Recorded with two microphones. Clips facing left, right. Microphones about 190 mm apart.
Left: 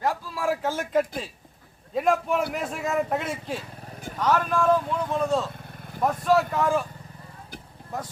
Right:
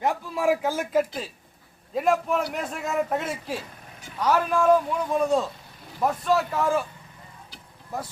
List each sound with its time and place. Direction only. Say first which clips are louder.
0.0 s speech: right 3 dB; 20° right (ahead or behind)
5.5 s vehicle: left 6 dB; 55° left (ahead or behind)
6.0 s speech: left 1 dB; centre (ahead or behind)